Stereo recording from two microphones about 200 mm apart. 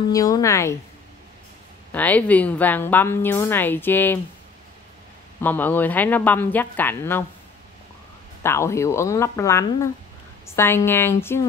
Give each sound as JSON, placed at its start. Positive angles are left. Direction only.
{"t": 0.1, "sound": "a woman's voice", "side_deg": 15}
{"t": 1.9, "sound": "a woman's voice", "side_deg": 10}
{"t": 5.4, "sound": "a woman's voice", "side_deg": 10}
{"t": 8.4, "sound": "a woman's voice", "side_deg": 15}